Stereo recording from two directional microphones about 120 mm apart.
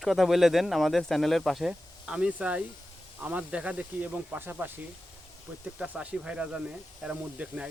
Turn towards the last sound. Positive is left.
turn(degrees=-10)  # may be behind; listen again after turning